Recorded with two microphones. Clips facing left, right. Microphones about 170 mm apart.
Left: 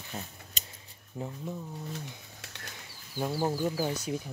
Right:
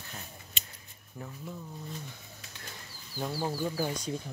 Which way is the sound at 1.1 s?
25° left (ahead or behind).